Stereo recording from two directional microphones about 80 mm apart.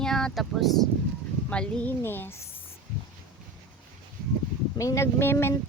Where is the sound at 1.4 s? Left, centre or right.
Centre.